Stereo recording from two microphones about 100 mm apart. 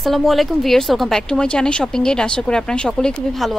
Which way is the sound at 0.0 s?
Centre (ahead or behind).